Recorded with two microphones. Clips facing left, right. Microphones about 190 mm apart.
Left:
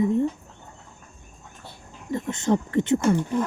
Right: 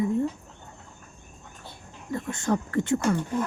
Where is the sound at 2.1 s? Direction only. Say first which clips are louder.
Left 3 dB; 20° left (ahead or behind).